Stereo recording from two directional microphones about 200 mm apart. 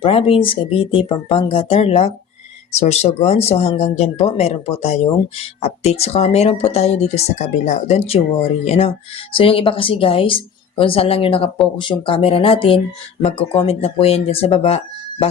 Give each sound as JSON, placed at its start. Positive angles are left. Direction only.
{"t": 0.0, "sound": "speech", "side_deg": 25}